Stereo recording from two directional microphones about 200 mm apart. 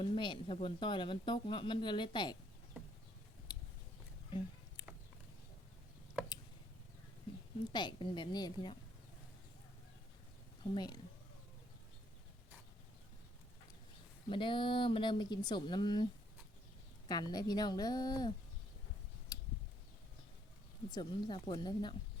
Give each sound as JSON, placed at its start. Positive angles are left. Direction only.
{"t": 0.0, "sound": "speech", "side_deg": 25}
{"t": 4.3, "sound": "a sound", "side_deg": 25}
{"t": 7.7, "sound": "speech", "side_deg": 20}
{"t": 10.6, "sound": "speech", "side_deg": 20}
{"t": 14.3, "sound": "speech", "side_deg": 25}
{"t": 17.1, "sound": "speech", "side_deg": 20}
{"t": 20.9, "sound": "speech", "side_deg": 20}